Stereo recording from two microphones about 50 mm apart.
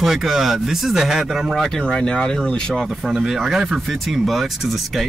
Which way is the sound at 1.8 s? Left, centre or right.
Centre.